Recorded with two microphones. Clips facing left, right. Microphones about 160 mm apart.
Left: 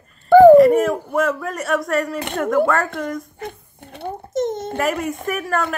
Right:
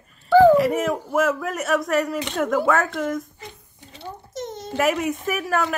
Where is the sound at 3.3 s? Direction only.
55° left (ahead or behind).